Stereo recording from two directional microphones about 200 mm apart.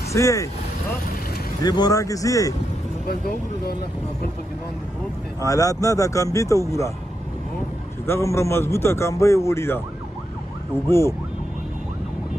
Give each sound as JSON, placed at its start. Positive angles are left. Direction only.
{"t": 0.1, "sound": "a man's voice", "side_deg": 15}
{"t": 1.6, "sound": "a man's voice", "side_deg": 20}
{"t": 3.1, "sound": "speech", "side_deg": 50}
{"t": 5.4, "sound": "a man's voice", "side_deg": 15}
{"t": 8.1, "sound": "a man's voice", "side_deg": 15}
{"t": 10.9, "sound": "a man's voice", "side_deg": 15}